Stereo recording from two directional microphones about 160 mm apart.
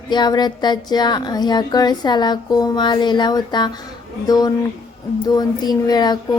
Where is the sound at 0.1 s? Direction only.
25° left (ahead or behind).